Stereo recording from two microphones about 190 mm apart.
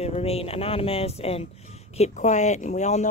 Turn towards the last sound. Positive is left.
turn(degrees=35)  # may be behind; listen again after turning